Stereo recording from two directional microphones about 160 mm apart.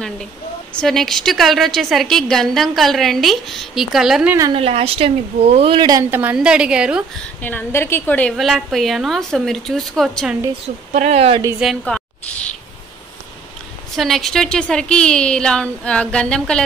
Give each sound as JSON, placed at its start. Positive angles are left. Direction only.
{"t": 0.7, "sound": "a woman's voice", "side_deg": 0}
{"t": 4.6, "sound": "a woman's voice", "side_deg": -35}
{"t": 6.0, "sound": "a woman's voice", "side_deg": -15}
{"t": 7.4, "sound": "a woman's voice", "side_deg": 10}
{"t": 10.9, "sound": "a woman's voice", "side_deg": -45}
{"t": 11.6, "sound": "a woman's voice", "side_deg": 0}
{"t": 13.9, "sound": "a woman's voice", "side_deg": 0}